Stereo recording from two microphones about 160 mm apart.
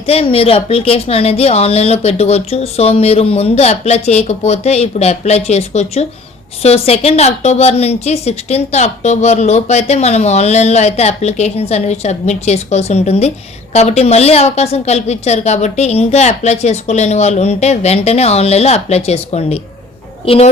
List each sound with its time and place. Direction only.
0.1 s a woman's voice: 40° left (ahead or behind)